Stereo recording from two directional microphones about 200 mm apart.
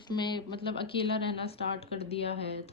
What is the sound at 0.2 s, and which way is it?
Speech, 20° left (ahead or behind).